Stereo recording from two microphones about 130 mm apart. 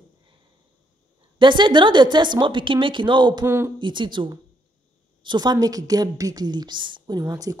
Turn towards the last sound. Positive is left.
turn(degrees=-25)  # may be behind; listen again after turning